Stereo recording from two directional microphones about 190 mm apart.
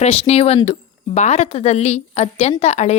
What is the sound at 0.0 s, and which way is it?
Speech, 35° left (ahead or behind).